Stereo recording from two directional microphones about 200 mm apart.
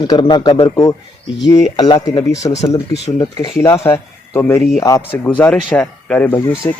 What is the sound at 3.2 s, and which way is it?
Speech, 15° left (ahead or behind).